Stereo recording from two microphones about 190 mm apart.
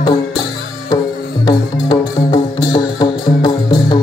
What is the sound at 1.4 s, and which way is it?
Music, 20° left (ahead or behind).